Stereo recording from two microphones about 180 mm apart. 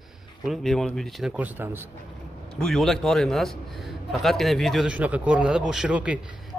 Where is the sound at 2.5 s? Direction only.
Centre (ahead or behind).